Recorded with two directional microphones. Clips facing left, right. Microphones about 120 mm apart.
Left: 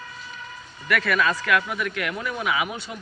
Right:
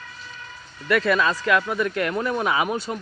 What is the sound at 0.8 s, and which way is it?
Speech, 30° right (ahead or behind).